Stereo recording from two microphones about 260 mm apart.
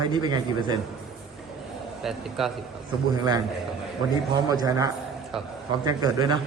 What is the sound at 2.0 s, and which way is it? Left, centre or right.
Speech, centre.